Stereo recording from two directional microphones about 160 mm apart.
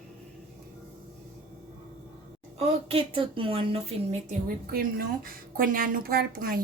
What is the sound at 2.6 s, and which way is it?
A woman's voice, 40° right (ahead or behind).